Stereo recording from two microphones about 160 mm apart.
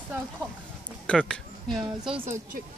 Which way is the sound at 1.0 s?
5° left (ahead or behind).